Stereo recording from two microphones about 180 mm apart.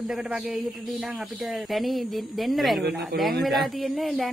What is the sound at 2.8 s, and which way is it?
Speech, 65° right (ahead or behind).